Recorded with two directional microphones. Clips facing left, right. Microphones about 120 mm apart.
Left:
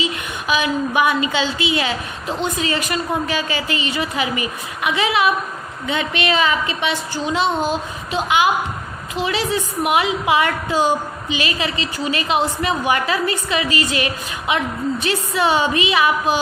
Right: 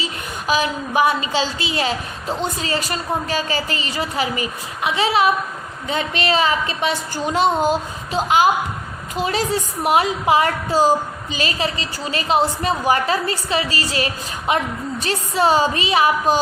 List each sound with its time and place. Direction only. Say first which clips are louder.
0.0 s a woman's voice: left 3 dB; 40° right (ahead or behind)